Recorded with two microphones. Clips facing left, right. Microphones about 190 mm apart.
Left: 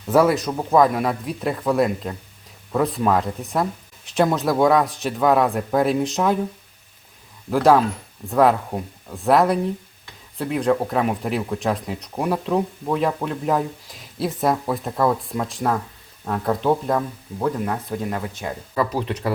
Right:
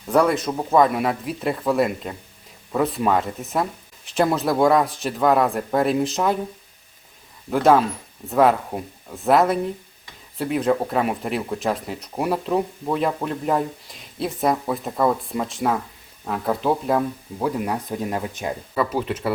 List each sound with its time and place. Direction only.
0.1 s speech: 5° left (ahead or behind)
7.5 s speech: centre (ahead or behind)
17.4 s speech: 15° right (ahead or behind)
18.7 s speech: 5° right (ahead or behind)